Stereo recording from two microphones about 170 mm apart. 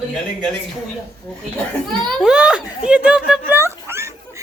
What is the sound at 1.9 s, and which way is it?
A child's voice, centre (ahead or behind).